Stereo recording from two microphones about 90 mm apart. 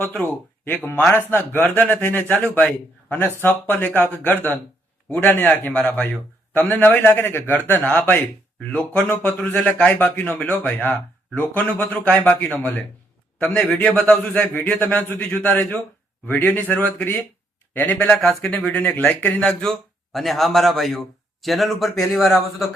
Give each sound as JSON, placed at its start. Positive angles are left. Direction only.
{"t": 0.0, "sound": "a man's voice", "side_deg": 20}
{"t": 13.7, "sound": "a man's voice", "side_deg": 15}